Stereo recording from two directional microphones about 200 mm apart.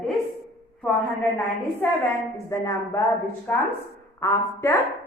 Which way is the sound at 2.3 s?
15° left (ahead or behind).